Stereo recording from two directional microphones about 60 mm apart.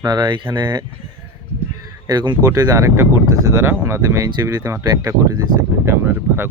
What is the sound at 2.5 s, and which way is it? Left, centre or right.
Speech, right.